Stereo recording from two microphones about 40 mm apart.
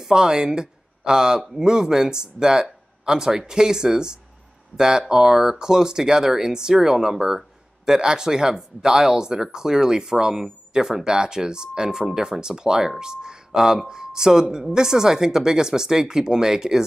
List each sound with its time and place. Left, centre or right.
0.0 s speech: centre